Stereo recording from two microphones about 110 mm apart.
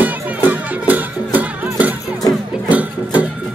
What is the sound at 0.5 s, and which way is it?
Music, 15° right (ahead or behind).